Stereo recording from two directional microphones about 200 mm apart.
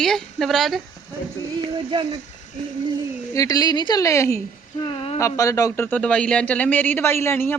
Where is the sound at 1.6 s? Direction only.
25° right (ahead or behind).